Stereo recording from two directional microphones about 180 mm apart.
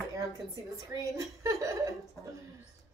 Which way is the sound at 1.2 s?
15° right (ahead or behind).